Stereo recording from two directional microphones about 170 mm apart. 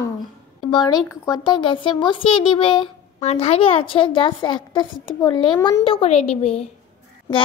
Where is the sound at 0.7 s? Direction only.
25° left (ahead or behind).